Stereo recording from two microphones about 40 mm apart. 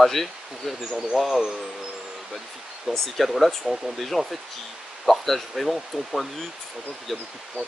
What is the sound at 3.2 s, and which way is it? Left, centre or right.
Speech, centre.